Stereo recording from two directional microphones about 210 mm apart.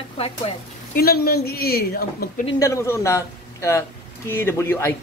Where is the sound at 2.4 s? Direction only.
15° left (ahead or behind).